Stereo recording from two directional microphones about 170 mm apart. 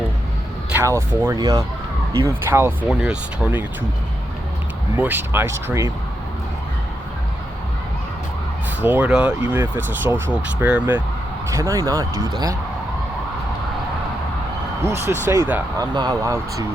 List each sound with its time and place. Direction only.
0.7 s speech: 15° right (ahead or behind)
4.9 s speech: 10° right (ahead or behind)
8.8 s speech: 10° right (ahead or behind)
11.7 s speech: 20° right (ahead or behind)
14.8 s speech: 15° right (ahead or behind)